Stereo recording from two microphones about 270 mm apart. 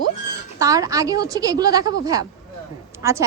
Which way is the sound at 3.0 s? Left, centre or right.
Centre.